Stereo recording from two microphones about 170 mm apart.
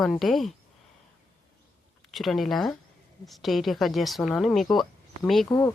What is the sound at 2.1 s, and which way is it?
Speech, centre (ahead or behind).